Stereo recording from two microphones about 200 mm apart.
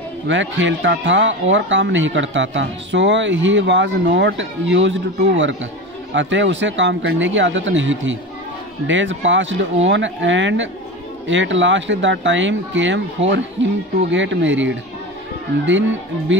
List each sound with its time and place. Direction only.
0.3 s speech: 65° right (ahead or behind)